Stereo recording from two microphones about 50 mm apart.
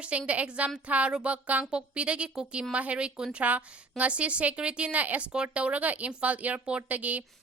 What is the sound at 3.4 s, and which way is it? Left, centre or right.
A woman's voice, right.